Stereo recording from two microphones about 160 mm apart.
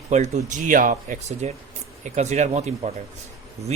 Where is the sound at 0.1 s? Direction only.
45° right (ahead or behind).